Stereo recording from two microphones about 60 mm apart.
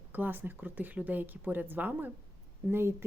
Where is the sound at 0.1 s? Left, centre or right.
Right.